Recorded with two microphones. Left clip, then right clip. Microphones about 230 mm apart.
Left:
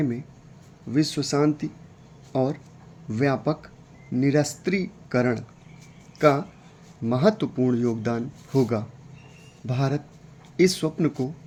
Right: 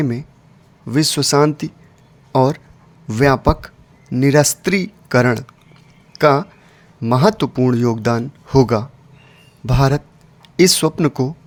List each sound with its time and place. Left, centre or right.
0.9 s speech: right